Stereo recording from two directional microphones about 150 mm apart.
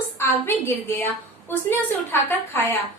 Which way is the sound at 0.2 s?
15° left (ahead or behind).